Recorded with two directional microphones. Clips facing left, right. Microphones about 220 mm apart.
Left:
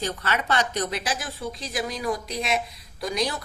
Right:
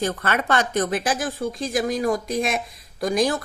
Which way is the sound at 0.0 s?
50° right (ahead or behind).